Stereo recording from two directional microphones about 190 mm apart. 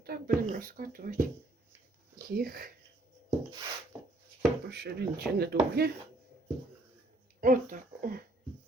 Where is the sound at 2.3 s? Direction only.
50° right (ahead or behind).